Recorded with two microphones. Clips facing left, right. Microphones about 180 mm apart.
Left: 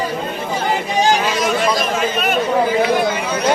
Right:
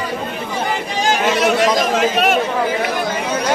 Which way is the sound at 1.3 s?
75° right (ahead or behind).